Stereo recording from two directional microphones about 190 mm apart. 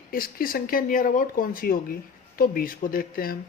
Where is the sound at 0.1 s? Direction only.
50° left (ahead or behind).